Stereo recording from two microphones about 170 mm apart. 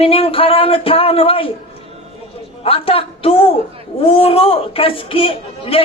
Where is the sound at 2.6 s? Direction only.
35° left (ahead or behind).